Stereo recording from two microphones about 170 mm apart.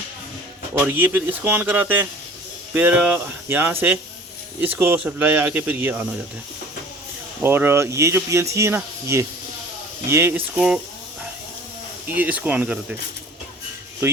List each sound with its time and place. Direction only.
0.9 s speech: 10° right (ahead or behind)
7.4 s speech: 15° right (ahead or behind)
12.0 s speech: 10° right (ahead or behind)
14.0 s speech: 15° right (ahead or behind)